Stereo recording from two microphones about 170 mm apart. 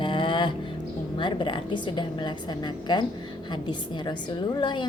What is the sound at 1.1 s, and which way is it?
A woman's voice, 30° left (ahead or behind).